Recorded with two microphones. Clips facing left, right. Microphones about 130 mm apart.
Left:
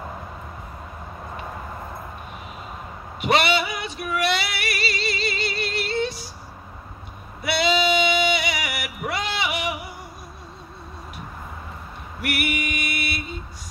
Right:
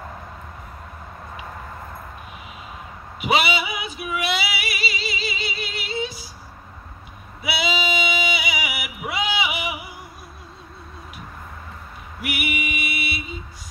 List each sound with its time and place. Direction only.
3.2 s female singing: 5° right (ahead or behind)
7.4 s music: 5° right (ahead or behind)
12.2 s female singing: centre (ahead or behind)